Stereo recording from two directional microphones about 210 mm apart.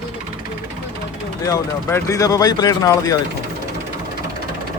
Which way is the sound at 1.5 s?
15° left (ahead or behind).